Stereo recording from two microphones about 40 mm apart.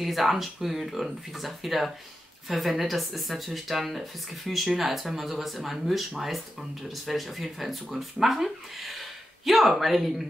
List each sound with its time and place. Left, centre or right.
0.0 s speech: centre